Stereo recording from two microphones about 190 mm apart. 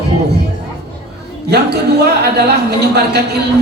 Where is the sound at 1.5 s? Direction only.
60° right (ahead or behind).